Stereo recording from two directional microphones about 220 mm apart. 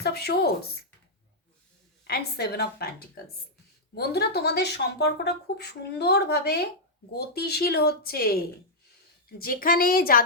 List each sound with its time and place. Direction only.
0.0 s speech: 45° left (ahead or behind)
2.0 s speech: 45° left (ahead or behind)
3.9 s a woman's voice: 45° left (ahead or behind)